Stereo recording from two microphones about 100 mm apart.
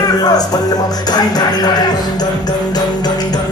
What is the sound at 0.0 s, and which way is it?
Music, 40° left (ahead or behind).